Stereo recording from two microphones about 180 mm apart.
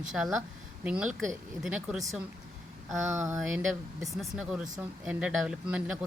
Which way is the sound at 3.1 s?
15° right (ahead or behind).